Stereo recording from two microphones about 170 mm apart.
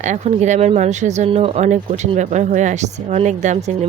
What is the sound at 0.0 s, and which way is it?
Speech, 45° right (ahead or behind).